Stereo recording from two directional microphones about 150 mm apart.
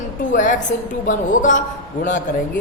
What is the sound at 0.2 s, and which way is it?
A woman's voice, 60° left (ahead or behind).